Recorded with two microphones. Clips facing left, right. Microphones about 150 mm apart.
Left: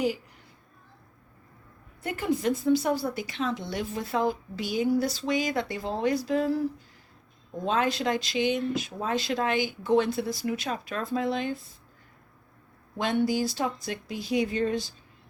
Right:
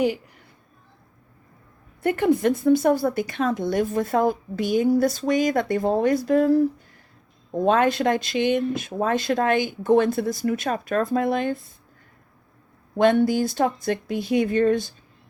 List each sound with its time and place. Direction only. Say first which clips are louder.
2.0 s a woman's voice: right 9 dB; 55° right (ahead or behind)
13.0 s a woman's voice: right 7 dB; 55° right (ahead or behind)